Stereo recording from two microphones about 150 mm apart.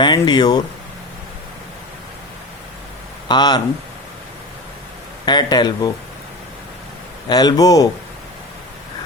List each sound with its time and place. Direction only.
0.0 s speech: 30° left (ahead or behind)
3.2 s speech: 30° left (ahead or behind)
5.2 s speech: 30° left (ahead or behind)
7.3 s speech: 25° left (ahead or behind)